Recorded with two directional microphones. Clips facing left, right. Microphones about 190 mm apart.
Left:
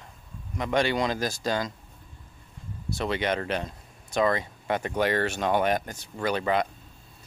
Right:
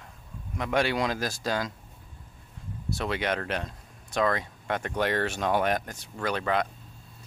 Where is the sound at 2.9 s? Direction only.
Centre (ahead or behind).